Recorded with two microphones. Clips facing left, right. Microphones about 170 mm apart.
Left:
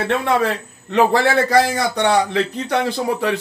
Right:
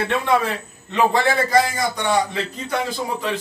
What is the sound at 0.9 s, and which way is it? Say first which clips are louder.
A man's voice: left 3 dB; 75° left (ahead or behind).